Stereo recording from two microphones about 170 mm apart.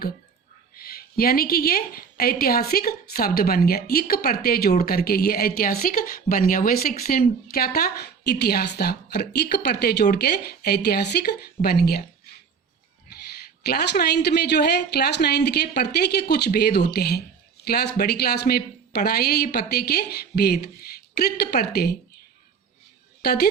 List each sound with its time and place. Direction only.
0.8 s a woman's voice: 60° left (ahead or behind)
13.7 s a woman's voice: 70° left (ahead or behind)
23.2 s a woman's voice: 65° left (ahead or behind)